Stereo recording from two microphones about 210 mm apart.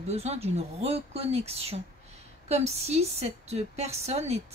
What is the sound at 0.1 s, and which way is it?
Speech, 30° right (ahead or behind).